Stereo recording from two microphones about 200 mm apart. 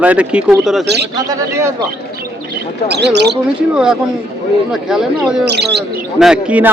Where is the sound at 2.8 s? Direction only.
55° right (ahead or behind).